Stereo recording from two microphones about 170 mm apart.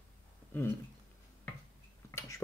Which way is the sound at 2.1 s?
20° left (ahead or behind).